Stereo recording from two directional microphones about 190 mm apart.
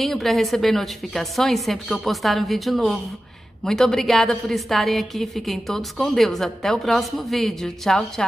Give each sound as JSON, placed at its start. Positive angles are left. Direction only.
{"t": 0.0, "sound": "a woman's voice", "side_deg": 0}